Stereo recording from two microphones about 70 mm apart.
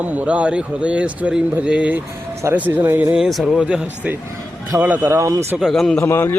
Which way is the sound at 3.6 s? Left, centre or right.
Centre.